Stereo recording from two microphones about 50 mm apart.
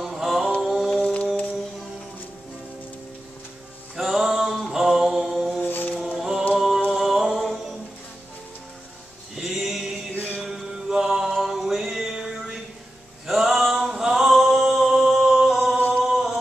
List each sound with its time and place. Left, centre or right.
0.0 s a sound: centre
1.0 s music: left
3.9 s music: centre
5.3 s mantra: centre
5.6 s a sound: left
5.9 s music: centre
9.4 s mantra: centre
10.1 s music: left
10.9 s music: centre
13.3 s singing: centre